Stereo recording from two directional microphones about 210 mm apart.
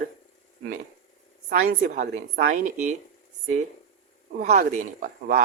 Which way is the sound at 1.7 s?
50° right (ahead or behind).